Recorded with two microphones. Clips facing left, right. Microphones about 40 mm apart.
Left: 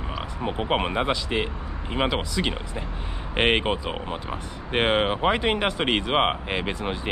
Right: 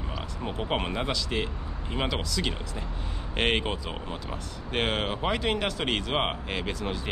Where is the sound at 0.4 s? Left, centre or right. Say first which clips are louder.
Left 5 dB; left.